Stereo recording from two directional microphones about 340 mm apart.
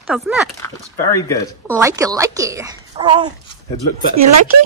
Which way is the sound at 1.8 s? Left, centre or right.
Centre.